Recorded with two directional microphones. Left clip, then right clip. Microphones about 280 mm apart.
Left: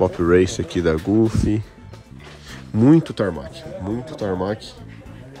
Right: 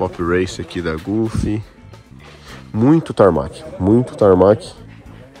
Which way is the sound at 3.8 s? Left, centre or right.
Left.